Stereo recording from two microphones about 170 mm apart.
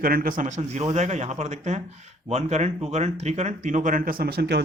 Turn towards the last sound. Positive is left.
turn(degrees=-70)  # may be behind; listen again after turning